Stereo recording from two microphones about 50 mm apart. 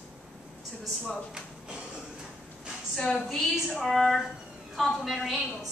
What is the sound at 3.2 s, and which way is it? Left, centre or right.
Speech, centre.